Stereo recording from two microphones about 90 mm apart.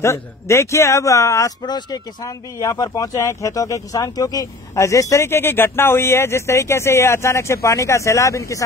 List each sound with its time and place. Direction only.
0.0 s speech: 35° left (ahead or behind)
1.6 s speech: 55° left (ahead or behind); by 8.6 s 35° left (ahead or behind)